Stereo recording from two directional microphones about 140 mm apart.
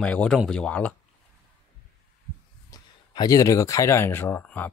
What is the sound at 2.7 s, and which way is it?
Speech, 30° left (ahead or behind).